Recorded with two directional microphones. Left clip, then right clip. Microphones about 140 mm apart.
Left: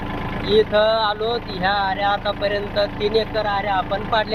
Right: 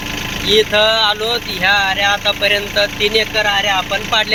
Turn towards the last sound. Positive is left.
turn(degrees=-35)  # may be behind; listen again after turning